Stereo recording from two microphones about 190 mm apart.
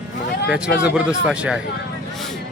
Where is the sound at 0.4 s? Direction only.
5° right (ahead or behind).